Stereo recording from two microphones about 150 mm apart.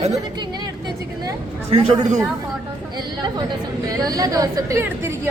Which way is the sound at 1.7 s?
40° right (ahead or behind).